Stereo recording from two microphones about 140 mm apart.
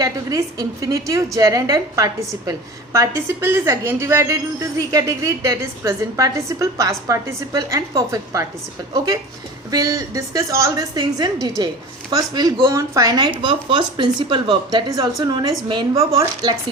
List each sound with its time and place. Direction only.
0.0 s a woman's voice: 25° right (ahead or behind)
9.6 s a woman's voice: 25° right (ahead or behind)